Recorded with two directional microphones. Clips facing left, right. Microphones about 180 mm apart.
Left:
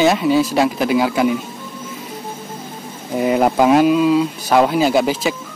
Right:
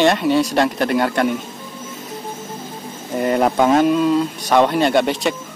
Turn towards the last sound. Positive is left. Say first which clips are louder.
# left 1 dB
turn(degrees=0)  # may be behind; listen again after turning